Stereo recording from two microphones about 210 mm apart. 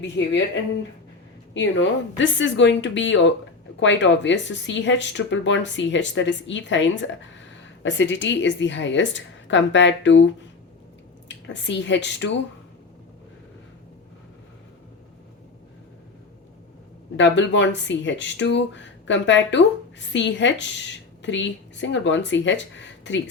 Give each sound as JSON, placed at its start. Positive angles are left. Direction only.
{"t": 0.0, "sound": "speech", "side_deg": 55}
{"t": 17.2, "sound": "speech", "side_deg": 60}